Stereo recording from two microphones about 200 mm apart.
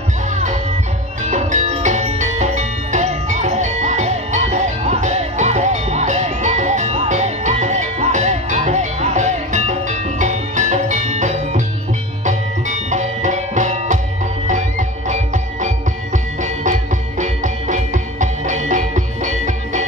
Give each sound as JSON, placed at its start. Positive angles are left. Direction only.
{"t": 1.2, "sound": "music", "side_deg": -35}